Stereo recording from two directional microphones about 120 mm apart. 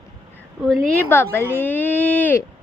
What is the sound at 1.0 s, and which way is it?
Speech, 15° left (ahead or behind).